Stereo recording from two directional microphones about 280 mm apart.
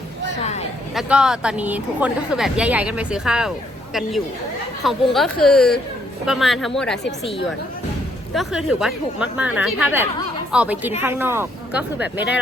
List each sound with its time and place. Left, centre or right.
0.4 s a sound: left
0.9 s speech: centre
4.8 s speech: centre
8.4 s speech: centre